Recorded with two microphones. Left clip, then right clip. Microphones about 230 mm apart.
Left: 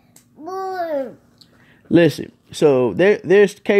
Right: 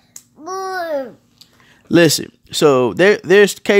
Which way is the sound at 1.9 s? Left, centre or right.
Right.